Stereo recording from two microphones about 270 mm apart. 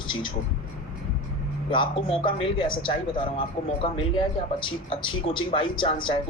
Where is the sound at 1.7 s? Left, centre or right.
Centre.